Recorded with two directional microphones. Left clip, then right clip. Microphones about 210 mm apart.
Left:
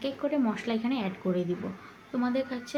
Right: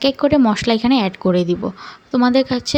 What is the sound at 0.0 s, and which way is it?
A woman's voice, 45° right (ahead or behind).